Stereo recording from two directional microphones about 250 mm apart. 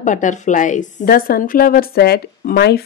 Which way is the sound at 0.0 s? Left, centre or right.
Left.